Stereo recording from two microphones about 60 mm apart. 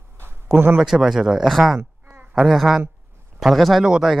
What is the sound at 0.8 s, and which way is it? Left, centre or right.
A man's voice, centre.